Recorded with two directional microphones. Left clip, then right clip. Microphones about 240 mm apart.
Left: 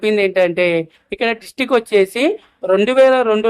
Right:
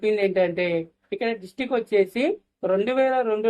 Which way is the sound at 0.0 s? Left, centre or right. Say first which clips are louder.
Left 7 dB; left.